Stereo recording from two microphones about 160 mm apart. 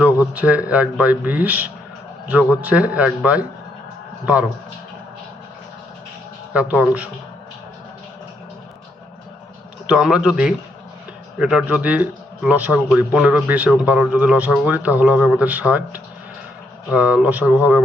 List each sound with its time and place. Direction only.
0.3 s a man's voice: 10° right (ahead or behind)
6.5 s a man's voice: 10° right (ahead or behind)
9.8 s a man's voice: 5° right (ahead or behind)